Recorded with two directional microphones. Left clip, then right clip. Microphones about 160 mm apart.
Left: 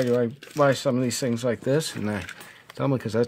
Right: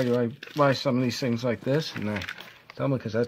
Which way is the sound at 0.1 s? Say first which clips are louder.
Left 3 dB; 15° left (ahead or behind).